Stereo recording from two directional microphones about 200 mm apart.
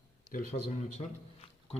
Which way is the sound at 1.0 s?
30° left (ahead or behind).